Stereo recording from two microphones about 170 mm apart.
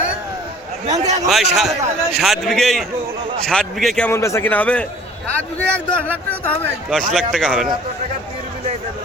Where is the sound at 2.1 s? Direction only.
Centre (ahead or behind).